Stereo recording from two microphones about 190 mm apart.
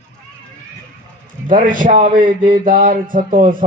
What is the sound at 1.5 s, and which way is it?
Speech, 45° right (ahead or behind).